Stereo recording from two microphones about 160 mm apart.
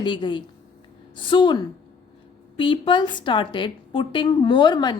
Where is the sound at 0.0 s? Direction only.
30° left (ahead or behind).